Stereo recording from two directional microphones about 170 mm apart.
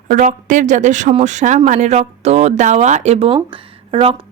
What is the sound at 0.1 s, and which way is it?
A woman's voice, 50° right (ahead or behind).